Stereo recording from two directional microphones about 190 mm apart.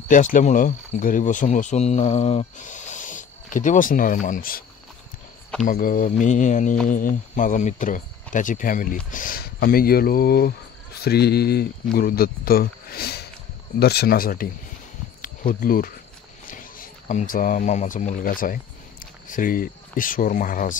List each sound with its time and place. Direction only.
0.1 s speech: 45° left (ahead or behind)
5.7 s mantra: 45° left (ahead or behind)
6.9 s speech: 45° left (ahead or behind)